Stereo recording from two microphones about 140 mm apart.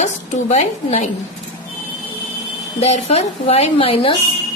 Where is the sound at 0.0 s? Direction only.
50° left (ahead or behind).